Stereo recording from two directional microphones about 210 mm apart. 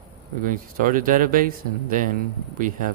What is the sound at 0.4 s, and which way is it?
Speech, 40° right (ahead or behind).